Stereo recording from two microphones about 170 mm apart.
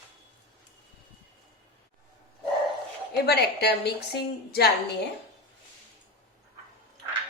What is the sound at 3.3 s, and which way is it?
A woman's voice, 70° left (ahead or behind).